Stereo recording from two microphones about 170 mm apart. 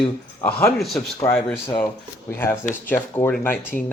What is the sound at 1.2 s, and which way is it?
Speech, 10° left (ahead or behind).